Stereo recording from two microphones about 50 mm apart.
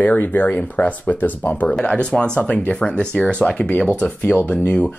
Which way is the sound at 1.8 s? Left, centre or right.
Left.